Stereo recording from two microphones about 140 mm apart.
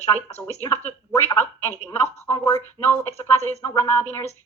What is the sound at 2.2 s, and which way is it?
A woman's voice, 20° left (ahead or behind).